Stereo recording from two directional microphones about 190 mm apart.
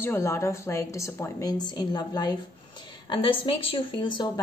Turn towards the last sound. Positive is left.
turn(degrees=25)  # may be behind; listen again after turning